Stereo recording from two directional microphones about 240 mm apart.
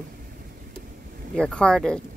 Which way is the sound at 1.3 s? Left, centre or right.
Centre.